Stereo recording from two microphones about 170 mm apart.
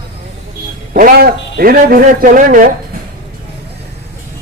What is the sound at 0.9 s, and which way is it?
A man's voice, 60° right (ahead or behind).